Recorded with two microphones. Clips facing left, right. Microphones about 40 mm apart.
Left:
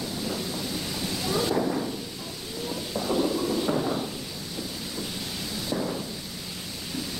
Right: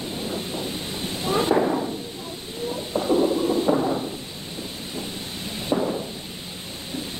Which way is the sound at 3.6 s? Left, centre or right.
Centre.